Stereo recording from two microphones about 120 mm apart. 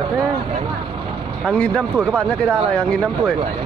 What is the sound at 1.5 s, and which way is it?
Speech, 10° left (ahead or behind).